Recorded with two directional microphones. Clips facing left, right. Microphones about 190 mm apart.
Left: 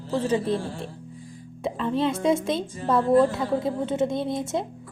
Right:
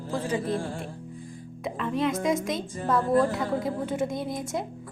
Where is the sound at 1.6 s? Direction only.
30° left (ahead or behind).